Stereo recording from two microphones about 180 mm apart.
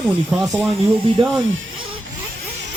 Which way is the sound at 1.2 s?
30° right (ahead or behind).